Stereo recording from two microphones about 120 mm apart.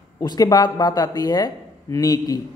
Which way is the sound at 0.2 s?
35° left (ahead or behind).